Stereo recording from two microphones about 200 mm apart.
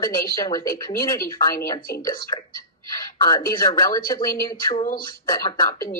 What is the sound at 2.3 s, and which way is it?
Speech, 25° left (ahead or behind).